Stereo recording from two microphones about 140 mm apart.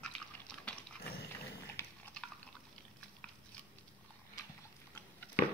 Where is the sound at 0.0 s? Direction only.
5° left (ahead or behind).